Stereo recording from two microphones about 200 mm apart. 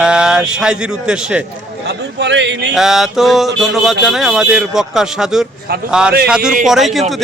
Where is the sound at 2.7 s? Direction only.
Centre (ahead or behind).